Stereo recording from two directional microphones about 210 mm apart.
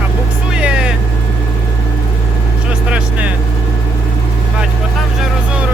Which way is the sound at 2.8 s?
5° right (ahead or behind).